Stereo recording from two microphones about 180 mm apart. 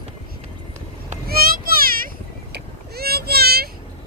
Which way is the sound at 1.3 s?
55° right (ahead or behind).